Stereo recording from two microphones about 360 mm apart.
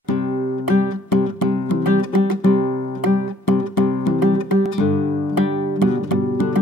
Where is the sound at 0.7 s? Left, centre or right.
Left.